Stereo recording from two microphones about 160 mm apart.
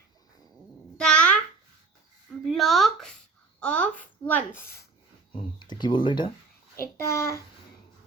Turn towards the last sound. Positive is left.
turn(degrees=20)  # may be behind; listen again after turning